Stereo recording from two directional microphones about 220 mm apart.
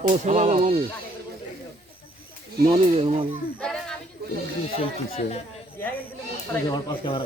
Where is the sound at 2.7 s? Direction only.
25° right (ahead or behind).